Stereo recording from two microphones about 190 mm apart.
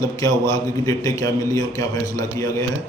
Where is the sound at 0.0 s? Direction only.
20° left (ahead or behind).